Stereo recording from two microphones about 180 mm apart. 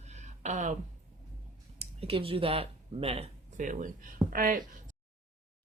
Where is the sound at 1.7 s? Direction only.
35° right (ahead or behind); by 4.6 s 50° right (ahead or behind).